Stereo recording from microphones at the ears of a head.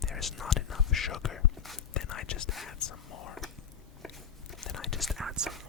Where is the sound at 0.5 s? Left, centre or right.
Left.